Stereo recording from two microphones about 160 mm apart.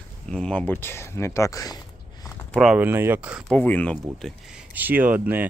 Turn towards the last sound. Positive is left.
turn(degrees=-10)  # may be behind; listen again after turning